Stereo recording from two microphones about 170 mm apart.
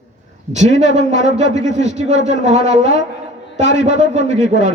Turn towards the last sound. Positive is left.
turn(degrees=-45)  # may be behind; listen again after turning